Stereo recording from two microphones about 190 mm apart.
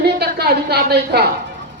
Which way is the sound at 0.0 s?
60° right (ahead or behind).